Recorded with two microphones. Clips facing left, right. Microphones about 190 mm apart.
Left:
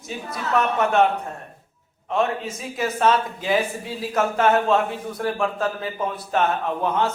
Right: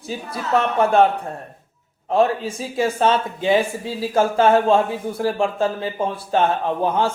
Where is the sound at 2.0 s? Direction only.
35° right (ahead or behind).